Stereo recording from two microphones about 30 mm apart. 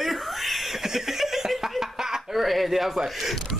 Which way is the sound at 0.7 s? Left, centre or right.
Centre.